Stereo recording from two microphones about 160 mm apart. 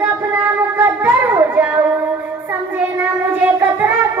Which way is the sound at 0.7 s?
10° right (ahead or behind).